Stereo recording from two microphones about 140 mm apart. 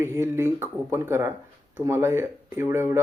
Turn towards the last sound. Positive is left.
turn(degrees=-20)  # may be behind; listen again after turning